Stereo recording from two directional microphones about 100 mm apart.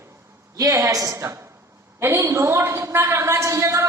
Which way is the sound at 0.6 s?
35° right (ahead or behind).